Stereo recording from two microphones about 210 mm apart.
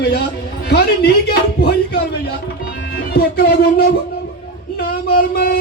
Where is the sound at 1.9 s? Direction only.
50° left (ahead or behind).